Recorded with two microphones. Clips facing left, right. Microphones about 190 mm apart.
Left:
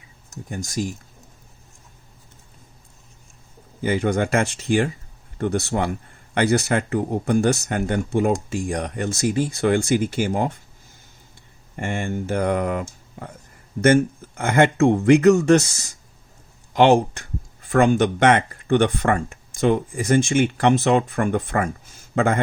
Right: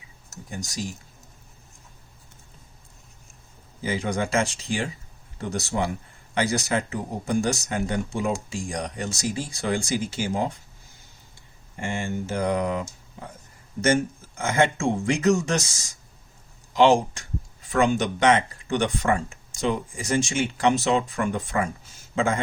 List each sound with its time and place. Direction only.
0.5 s speech: 50° left (ahead or behind)
3.8 s speech: 60° left (ahead or behind)
11.8 s a man's voice: 55° left (ahead or behind)